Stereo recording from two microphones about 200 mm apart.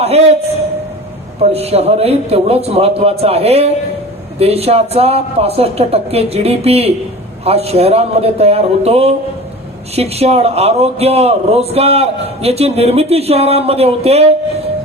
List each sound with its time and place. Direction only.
1.4 s a man's voice: 30° right (ahead or behind)